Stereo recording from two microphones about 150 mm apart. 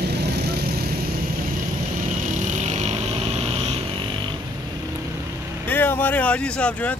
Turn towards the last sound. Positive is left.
turn(degrees=10)  # may be behind; listen again after turning